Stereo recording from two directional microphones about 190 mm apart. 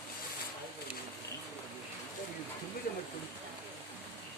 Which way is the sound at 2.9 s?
50° left (ahead or behind).